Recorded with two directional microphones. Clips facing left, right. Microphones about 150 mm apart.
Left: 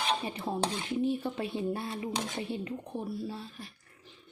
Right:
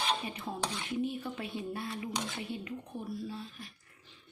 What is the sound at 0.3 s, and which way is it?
Speech, 30° left (ahead or behind).